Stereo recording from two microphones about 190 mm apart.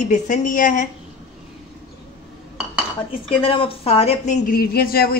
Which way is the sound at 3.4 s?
30° left (ahead or behind).